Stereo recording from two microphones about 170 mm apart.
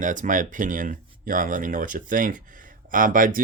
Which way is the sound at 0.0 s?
50° right (ahead or behind).